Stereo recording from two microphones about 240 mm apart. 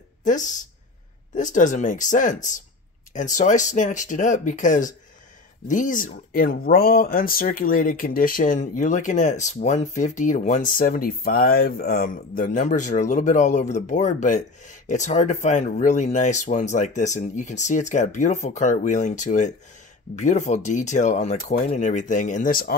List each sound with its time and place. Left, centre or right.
0.2 s speech: left